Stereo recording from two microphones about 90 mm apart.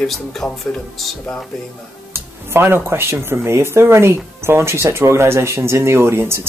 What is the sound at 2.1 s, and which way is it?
Speech, 25° right (ahead or behind).